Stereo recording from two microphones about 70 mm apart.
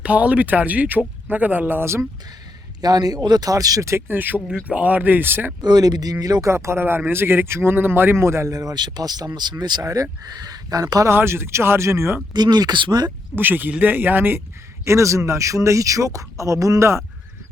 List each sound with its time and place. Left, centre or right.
0.0 s speech: right
2.8 s speech: right
3.9 s speech: right
5.6 s speech: right
6.5 s speech: right
8.5 s speech: right
11.1 s speech: right
12.3 s speech: right
13.3 s speech: right
14.8 s speech: right